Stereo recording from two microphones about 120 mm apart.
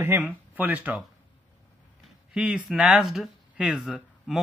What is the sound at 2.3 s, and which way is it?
Speech, 5° right (ahead or behind).